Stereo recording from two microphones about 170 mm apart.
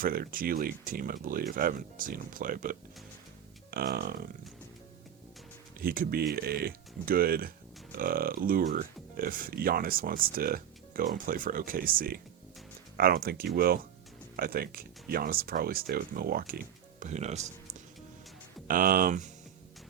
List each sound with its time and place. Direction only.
0.0 s speech: 55° right (ahead or behind)
3.7 s speech: 65° right (ahead or behind)
5.8 s speech: 60° right (ahead or behind); by 17.8 s 45° right (ahead or behind)
18.7 s speech: 55° right (ahead or behind)